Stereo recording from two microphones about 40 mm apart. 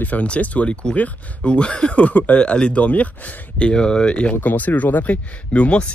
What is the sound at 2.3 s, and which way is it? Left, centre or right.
Speech, left.